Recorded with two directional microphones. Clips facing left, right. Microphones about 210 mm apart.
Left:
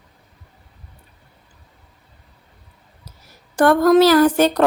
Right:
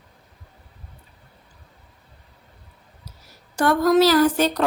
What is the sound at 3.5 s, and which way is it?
A woman's voice, 55° left (ahead or behind).